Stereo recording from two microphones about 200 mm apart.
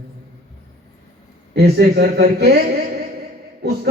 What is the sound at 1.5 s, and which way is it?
Speech, 55° right (ahead or behind).